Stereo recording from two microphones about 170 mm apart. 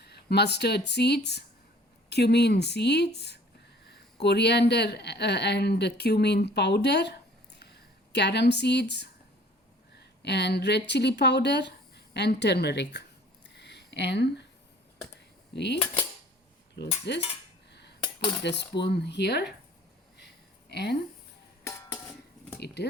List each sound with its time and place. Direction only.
0.0 s speech: 75° left (ahead or behind)
13.6 s a sound: 85° left
15.5 s speech: 85° left
16.8 s cutlery: 70° left (ahead or behind)
17.7 s cutlery: 85° left
18.4 s speech: 80° left
20.1 s a sound: 75° left (ahead or behind)
21.9 s dishes: 10° left (ahead or behind)
22.6 s speech: 75° left (ahead or behind)